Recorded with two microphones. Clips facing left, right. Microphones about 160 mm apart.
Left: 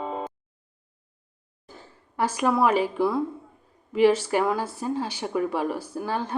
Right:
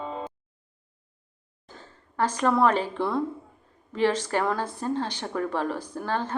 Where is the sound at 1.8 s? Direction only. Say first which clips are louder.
Even; 10° left (ahead or behind).